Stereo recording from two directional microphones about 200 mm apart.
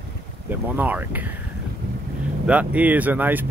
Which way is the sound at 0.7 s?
10° right (ahead or behind).